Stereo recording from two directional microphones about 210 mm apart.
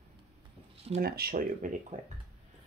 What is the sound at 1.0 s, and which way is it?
Speech, 45° right (ahead or behind).